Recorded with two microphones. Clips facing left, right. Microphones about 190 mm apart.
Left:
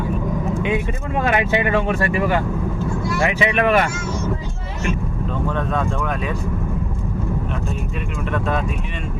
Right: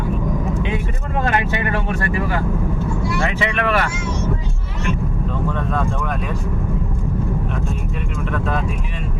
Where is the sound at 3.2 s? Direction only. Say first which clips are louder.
Left 6 dB; 15° left (ahead or behind).